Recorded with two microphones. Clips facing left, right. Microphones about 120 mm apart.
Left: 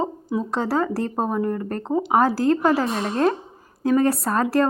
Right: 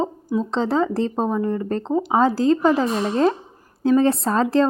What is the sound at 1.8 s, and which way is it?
Speech, 15° left (ahead or behind).